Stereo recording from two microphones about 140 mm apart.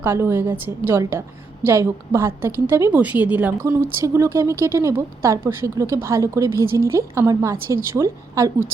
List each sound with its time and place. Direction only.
0.0 s speech: 15° right (ahead or behind)